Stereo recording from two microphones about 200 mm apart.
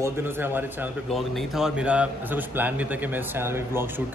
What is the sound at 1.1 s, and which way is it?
A man's voice, centre (ahead or behind).